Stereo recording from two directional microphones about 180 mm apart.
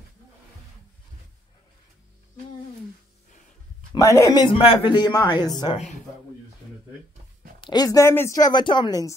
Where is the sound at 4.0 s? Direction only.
20° left (ahead or behind).